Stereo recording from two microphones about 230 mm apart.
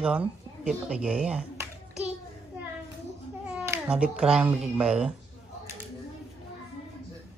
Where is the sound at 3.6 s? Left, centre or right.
Centre.